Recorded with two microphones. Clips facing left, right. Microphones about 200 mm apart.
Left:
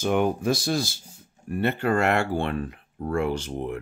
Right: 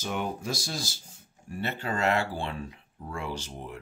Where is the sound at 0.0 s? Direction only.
55° left (ahead or behind).